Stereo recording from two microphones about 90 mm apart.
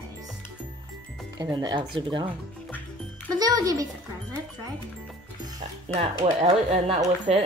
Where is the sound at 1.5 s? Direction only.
60° right (ahead or behind).